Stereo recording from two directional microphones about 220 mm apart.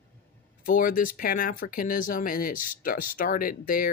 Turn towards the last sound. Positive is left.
turn(degrees=40)  # may be behind; listen again after turning